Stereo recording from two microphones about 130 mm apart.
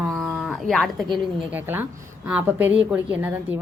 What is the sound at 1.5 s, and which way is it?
Speech, 15° right (ahead or behind).